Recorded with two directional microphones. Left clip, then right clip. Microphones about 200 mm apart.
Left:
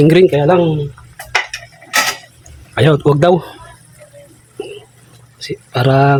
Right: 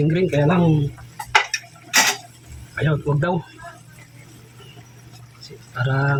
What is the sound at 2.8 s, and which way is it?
Speech, 55° left (ahead or behind).